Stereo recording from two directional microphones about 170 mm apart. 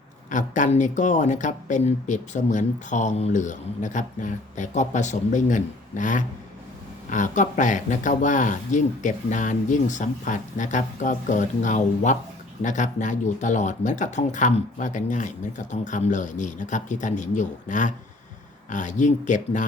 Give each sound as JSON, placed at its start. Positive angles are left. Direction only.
{"t": 0.3, "sound": "speech", "side_deg": 45}